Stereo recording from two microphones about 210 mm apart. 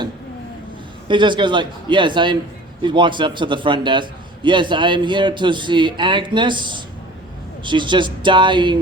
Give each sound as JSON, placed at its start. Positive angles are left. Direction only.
{"t": 1.0, "sound": "a man's voice", "side_deg": -20}